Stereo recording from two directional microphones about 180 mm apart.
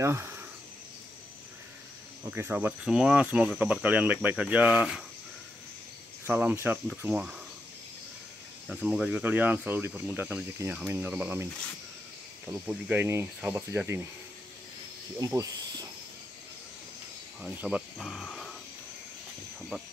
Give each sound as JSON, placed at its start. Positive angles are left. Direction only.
{"t": 0.0, "sound": "speech", "side_deg": -15}
{"t": 2.2, "sound": "cricket", "side_deg": -10}
{"t": 6.2, "sound": "cricket", "side_deg": -10}
{"t": 6.9, "sound": "speech", "side_deg": -5}
{"t": 8.6, "sound": "cricket", "side_deg": 0}
{"t": 12.4, "sound": "cricket", "side_deg": -5}
{"t": 15.1, "sound": "speech", "side_deg": -20}
{"t": 17.4, "sound": "speech", "side_deg": -5}